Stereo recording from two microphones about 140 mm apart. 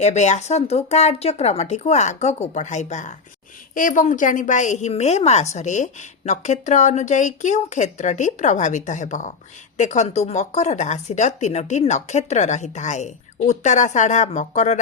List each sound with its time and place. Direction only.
0.0 s speech: 55° left (ahead or behind)
3.8 s a woman's voice: 70° left (ahead or behind)